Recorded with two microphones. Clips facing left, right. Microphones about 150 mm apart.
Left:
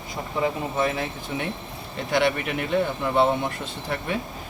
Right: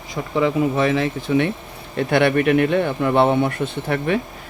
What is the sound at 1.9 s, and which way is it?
Speech, 60° right (ahead or behind).